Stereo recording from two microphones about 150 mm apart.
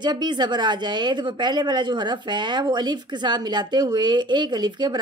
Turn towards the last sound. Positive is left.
turn(degrees=-30)  # may be behind; listen again after turning